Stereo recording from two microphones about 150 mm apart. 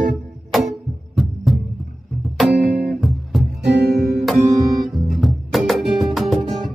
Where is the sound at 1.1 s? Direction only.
Centre (ahead or behind).